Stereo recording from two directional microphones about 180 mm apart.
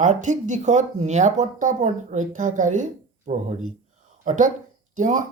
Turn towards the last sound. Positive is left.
turn(degrees=-45)  # may be behind; listen again after turning